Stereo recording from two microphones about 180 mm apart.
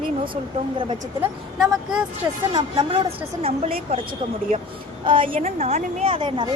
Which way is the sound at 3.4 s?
35° right (ahead or behind).